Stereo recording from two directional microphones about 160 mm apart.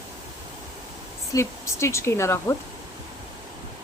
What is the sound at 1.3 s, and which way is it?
Speech, 15° left (ahead or behind).